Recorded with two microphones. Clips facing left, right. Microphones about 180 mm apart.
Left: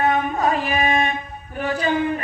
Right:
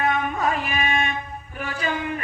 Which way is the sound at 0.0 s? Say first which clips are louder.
Left 3 dB; 35° left (ahead or behind).